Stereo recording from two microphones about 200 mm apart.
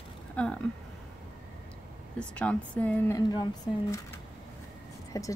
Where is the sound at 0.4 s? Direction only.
5° left (ahead or behind).